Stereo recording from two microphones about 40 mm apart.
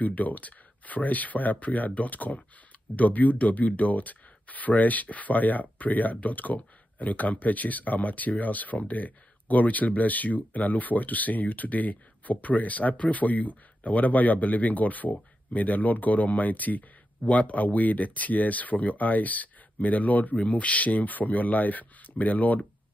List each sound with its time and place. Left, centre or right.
0.0 s speech: left